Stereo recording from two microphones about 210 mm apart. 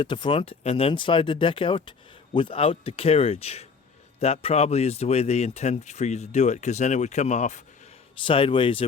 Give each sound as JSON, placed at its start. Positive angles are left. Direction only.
{"t": 0.0, "sound": "speech", "side_deg": 25}